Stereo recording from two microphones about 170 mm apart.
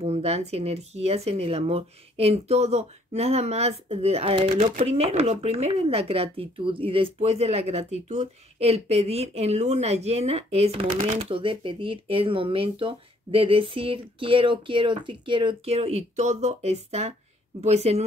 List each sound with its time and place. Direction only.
0.0 s speech: 40° right (ahead or behind)